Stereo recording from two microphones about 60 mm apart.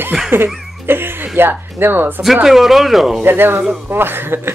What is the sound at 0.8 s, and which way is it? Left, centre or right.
Speech, right.